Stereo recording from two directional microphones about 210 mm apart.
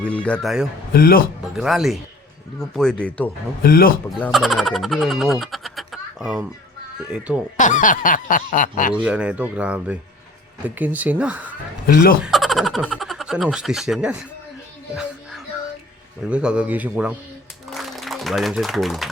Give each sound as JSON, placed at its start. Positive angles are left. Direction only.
{"t": 0.0, "sound": "speech", "side_deg": 5}
{"t": 0.9, "sound": "a man's voice", "side_deg": 45}
{"t": 1.5, "sound": "speech", "side_deg": 0}
{"t": 3.6, "sound": "a man's voice", "side_deg": 45}
{"t": 4.2, "sound": "speech", "side_deg": 0}
{"t": 7.6, "sound": "a sound", "side_deg": 40}
{"t": 9.0, "sound": "speech", "side_deg": -5}
{"t": 11.9, "sound": "a man's voice", "side_deg": 45}
{"t": 12.2, "sound": "speech", "side_deg": 0}
{"t": 16.2, "sound": "speech", "side_deg": -5}
{"t": 17.7, "sound": "music", "side_deg": 0}